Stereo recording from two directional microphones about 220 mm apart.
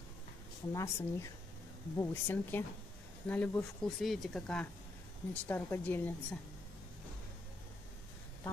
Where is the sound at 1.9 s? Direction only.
10° left (ahead or behind).